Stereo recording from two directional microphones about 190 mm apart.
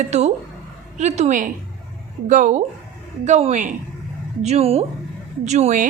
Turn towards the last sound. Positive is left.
turn(degrees=-40)  # may be behind; listen again after turning